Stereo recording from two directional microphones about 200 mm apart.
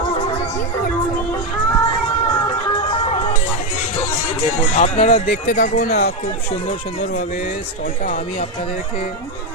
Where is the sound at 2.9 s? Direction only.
30° left (ahead or behind).